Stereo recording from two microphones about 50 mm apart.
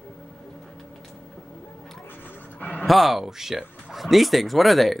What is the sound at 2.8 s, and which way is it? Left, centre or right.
Speech, centre.